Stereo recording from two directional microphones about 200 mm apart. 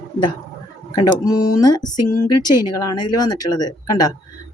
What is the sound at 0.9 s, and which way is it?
A woman's voice, 15° left (ahead or behind).